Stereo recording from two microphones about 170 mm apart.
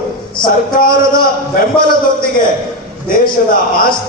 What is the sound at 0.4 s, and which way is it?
A man's voice, 55° left (ahead or behind).